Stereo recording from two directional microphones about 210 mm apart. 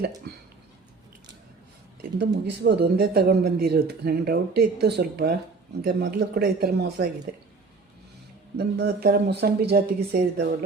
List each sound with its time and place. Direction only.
2.0 s speech: 50° right (ahead or behind)
8.5 s speech: 50° right (ahead or behind)